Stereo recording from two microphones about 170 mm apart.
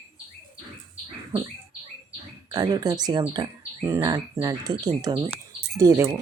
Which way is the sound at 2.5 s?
25° right (ahead or behind).